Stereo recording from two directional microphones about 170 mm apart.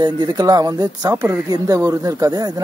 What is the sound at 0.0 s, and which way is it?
Speech, 25° right (ahead or behind).